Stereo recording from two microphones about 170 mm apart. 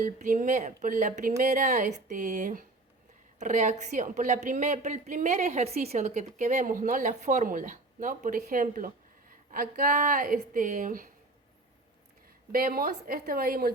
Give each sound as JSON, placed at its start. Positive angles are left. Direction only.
{"t": 0.0, "sound": "speech", "side_deg": -50}
{"t": 12.5, "sound": "a woman's voice", "side_deg": -60}